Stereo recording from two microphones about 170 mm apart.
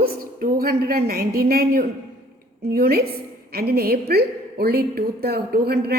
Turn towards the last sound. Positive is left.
turn(degrees=-70)  # may be behind; listen again after turning